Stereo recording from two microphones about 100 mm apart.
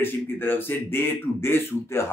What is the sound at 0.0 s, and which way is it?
Speech, 20° left (ahead or behind).